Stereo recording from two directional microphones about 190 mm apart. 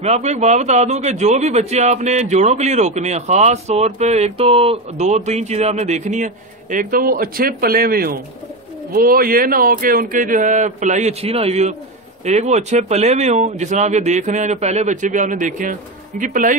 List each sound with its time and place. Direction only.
0.0 s a man's voice: 35° right (ahead or behind)